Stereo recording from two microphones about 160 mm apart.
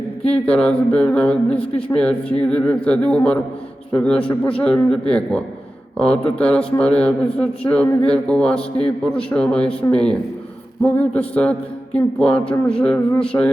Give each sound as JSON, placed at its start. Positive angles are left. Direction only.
{"t": 0.2, "sound": "a man's voice", "side_deg": 10}